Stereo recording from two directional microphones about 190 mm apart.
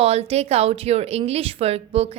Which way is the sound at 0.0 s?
30° right (ahead or behind).